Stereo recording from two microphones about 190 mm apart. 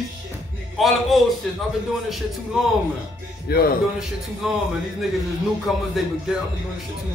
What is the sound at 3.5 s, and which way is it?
Speech, 55° left (ahead or behind).